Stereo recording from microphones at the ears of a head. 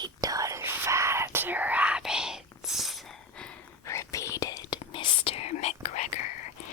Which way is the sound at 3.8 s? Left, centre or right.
Left.